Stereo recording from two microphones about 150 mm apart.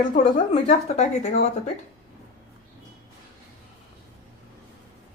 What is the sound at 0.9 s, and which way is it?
Speech, 50° left (ahead or behind).